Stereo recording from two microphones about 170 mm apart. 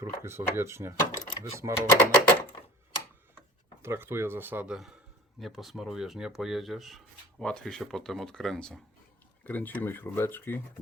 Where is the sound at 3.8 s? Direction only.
15° right (ahead or behind).